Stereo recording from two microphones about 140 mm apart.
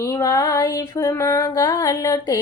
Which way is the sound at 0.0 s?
25° left (ahead or behind).